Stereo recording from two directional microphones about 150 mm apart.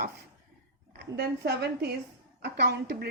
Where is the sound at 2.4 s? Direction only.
90° right.